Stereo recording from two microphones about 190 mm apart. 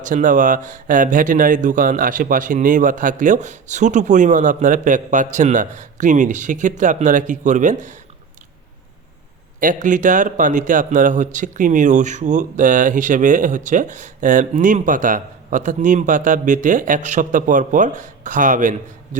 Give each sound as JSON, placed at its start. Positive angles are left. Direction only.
{"t": 0.0, "sound": "a man's voice", "side_deg": -45}
{"t": 9.6, "sound": "a man's voice", "side_deg": -45}